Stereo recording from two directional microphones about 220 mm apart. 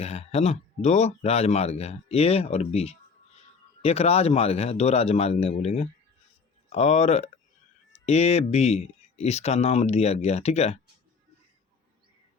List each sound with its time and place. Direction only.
0.0 s speech: 30° left (ahead or behind)